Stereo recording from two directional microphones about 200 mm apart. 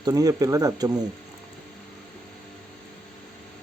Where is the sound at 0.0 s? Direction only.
15° right (ahead or behind).